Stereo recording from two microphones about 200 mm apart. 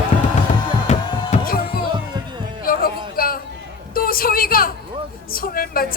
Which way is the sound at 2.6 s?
45° left (ahead or behind).